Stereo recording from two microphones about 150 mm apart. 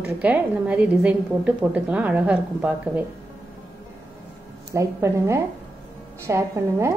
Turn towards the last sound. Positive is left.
turn(degrees=-20)  # may be behind; listen again after turning